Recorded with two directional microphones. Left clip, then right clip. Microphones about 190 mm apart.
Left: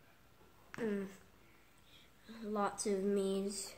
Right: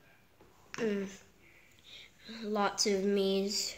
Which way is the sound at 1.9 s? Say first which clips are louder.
Right 9 dB; 5° right (ahead or behind).